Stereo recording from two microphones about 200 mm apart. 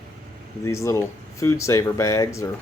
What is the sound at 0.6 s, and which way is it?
Speech, 15° left (ahead or behind).